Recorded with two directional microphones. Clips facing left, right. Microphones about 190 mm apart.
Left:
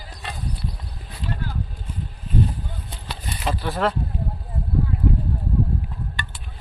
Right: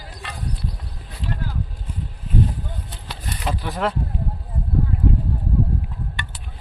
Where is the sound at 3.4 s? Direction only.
Centre (ahead or behind).